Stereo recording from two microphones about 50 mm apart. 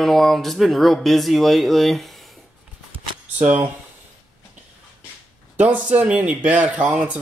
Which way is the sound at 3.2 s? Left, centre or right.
Right.